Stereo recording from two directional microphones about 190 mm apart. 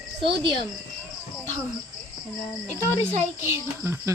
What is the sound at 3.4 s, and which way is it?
Speech, 15° right (ahead or behind).